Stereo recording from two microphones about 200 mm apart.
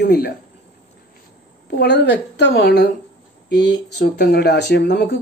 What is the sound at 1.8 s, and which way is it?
A man's voice, 60° left (ahead or behind).